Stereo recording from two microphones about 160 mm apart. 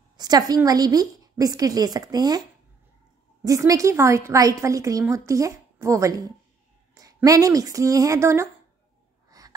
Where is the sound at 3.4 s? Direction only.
20° right (ahead or behind).